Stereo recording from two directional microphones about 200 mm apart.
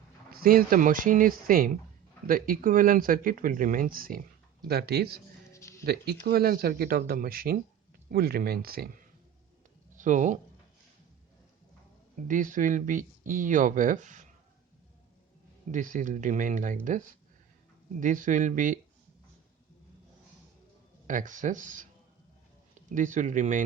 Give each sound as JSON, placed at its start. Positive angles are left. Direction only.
{"t": 0.3, "sound": "speech", "side_deg": -45}
{"t": 5.5, "sound": "music", "side_deg": 15}
{"t": 5.8, "sound": "speech", "side_deg": -50}
{"t": 12.3, "sound": "speech", "side_deg": -40}
{"t": 15.7, "sound": "speech", "side_deg": -40}
{"t": 18.0, "sound": "speech", "side_deg": -40}
{"t": 21.1, "sound": "speech", "side_deg": -40}
{"t": 22.9, "sound": "speech", "side_deg": -40}